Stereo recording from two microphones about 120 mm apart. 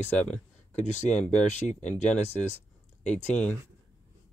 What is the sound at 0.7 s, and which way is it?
Speech, 75° left (ahead or behind).